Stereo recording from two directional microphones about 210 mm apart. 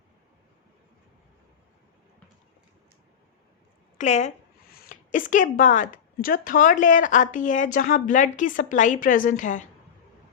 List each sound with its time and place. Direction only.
3.9 s a woman's voice: 35° left (ahead or behind)